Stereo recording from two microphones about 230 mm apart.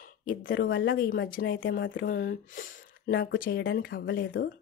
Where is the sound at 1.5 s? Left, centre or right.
Left.